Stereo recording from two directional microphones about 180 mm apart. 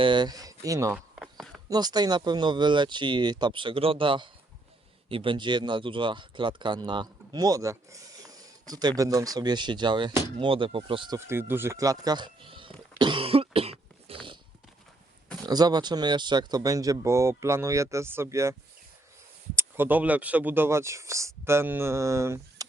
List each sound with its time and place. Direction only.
0.0 s speech: 25° right (ahead or behind)
0.9 s a sound: centre (ahead or behind)
1.7 s speech: 20° right (ahead or behind)
11.3 s speech: 10° right (ahead or behind); by 12.7 s 30° right (ahead or behind)
13.0 s cough: 30° right (ahead or behind)
15.4 s speech: 20° right (ahead or behind)
19.5 s speech: 10° right (ahead or behind)